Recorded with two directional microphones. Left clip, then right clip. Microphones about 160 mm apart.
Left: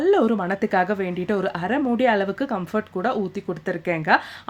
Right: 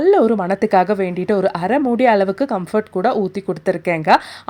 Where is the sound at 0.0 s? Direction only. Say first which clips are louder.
Right 6 dB; 35° right (ahead or behind).